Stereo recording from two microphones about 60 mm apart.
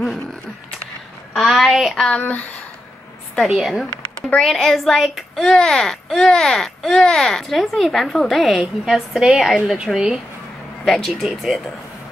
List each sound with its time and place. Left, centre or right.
1.3 s a child's voice: centre
2.0 s speech: left
3.3 s a child's voice: centre
9.9 s speech: centre
10.9 s a child's voice: centre